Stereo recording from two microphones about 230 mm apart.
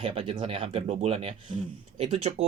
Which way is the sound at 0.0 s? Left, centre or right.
Right.